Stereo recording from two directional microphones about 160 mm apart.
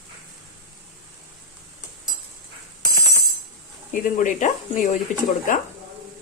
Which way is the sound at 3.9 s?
55° left (ahead or behind).